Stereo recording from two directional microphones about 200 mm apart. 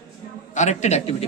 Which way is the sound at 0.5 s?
35° left (ahead or behind).